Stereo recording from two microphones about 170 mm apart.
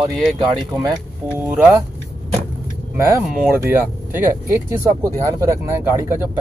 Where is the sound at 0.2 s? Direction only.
Centre (ahead or behind).